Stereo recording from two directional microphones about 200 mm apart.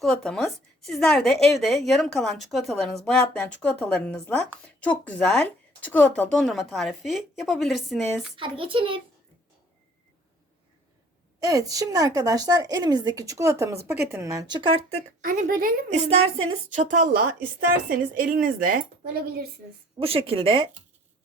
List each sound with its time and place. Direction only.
0.0 s a woman's voice: 5° left (ahead or behind)
8.4 s speech: 25° right (ahead or behind)
11.3 s a woman's voice: 15° right (ahead or behind)
15.2 s speech: 45° right (ahead or behind)
15.9 s a woman's voice: 30° right (ahead or behind); by 19.5 s 50° right (ahead or behind)
20.0 s speech: 30° right (ahead or behind)